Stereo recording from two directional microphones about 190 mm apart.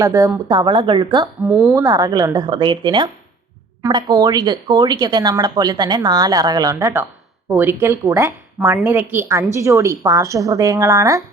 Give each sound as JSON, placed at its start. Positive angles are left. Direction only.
{"t": 0.0, "sound": "speech", "side_deg": -15}
{"t": 1.4, "sound": "a woman's voice", "side_deg": -5}
{"t": 1.7, "sound": "speech", "side_deg": -20}